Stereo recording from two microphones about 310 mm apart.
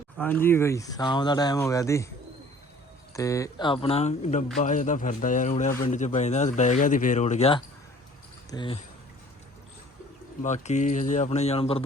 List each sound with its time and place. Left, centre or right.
0.2 s speech: centre
3.2 s a man's voice: centre
10.4 s a man's voice: left